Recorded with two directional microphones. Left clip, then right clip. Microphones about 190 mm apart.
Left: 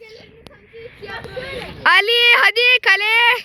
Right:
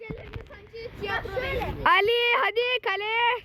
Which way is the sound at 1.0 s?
30° left (ahead or behind).